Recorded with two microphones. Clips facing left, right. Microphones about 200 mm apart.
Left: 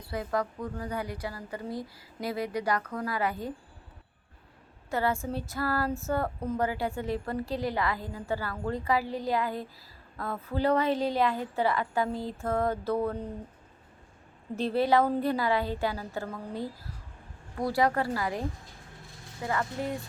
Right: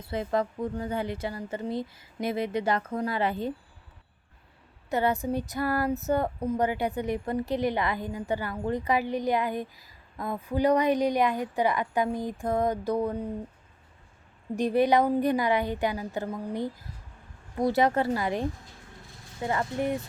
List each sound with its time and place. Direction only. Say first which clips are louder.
0.0 s a woman's voice: right 3 dB; 25° right (ahead or behind)
4.9 s speech: right 3 dB; 20° right (ahead or behind)
14.5 s a woman's voice: right 2 dB; 15° right (ahead or behind)